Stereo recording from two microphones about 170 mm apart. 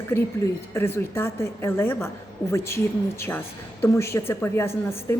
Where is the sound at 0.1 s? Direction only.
15° left (ahead or behind).